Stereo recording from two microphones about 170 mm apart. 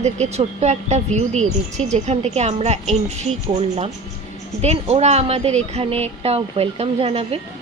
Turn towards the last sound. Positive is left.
turn(degrees=-35)  # may be behind; listen again after turning